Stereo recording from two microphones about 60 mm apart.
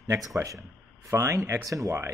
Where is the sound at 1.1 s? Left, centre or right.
Right.